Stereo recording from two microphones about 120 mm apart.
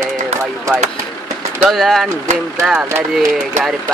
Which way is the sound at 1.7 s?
Centre (ahead or behind).